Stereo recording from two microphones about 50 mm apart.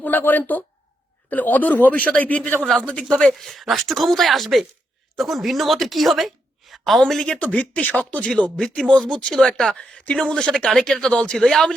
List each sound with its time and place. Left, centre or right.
0.0 s a man's voice: left
3.3 s a woman's voice: centre
7.3 s speech: left
8.5 s a woman's voice: centre
9.6 s a woman's voice: centre
11.4 s a woman's voice: centre